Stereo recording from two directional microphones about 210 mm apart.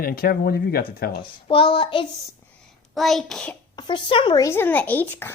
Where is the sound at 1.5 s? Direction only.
25° left (ahead or behind).